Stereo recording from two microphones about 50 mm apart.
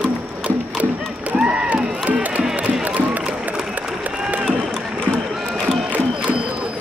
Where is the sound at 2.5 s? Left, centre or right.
Right.